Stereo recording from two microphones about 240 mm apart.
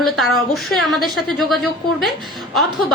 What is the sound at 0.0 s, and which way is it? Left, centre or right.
A woman's voice, centre.